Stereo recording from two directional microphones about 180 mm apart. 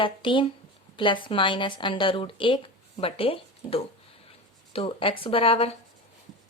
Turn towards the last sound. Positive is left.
turn(degrees=30)  # may be behind; listen again after turning